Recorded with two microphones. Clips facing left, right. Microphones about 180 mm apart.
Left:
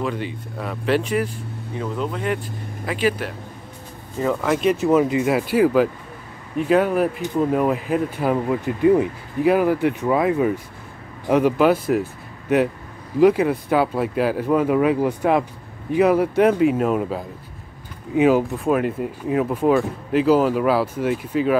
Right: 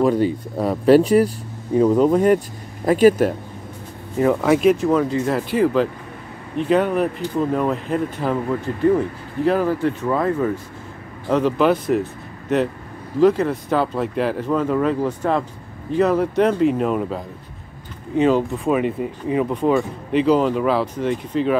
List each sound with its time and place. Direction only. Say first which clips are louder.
0.0 s speech: right 9 dB; 40° right (ahead or behind)
4.2 s speech: right 4 dB; 15° right (ahead or behind)
4.6 s speech: right 1 dB; centre (ahead or behind)
13.2 s speech: left 1 dB; 10° left (ahead or behind)